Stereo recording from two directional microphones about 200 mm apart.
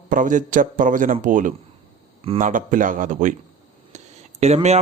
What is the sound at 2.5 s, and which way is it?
A man's voice, 40° right (ahead or behind).